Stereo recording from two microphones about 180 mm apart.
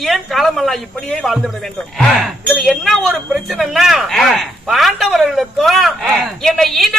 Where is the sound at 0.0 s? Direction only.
Centre (ahead or behind).